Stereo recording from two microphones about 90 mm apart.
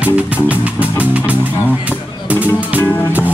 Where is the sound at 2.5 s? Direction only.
20° right (ahead or behind).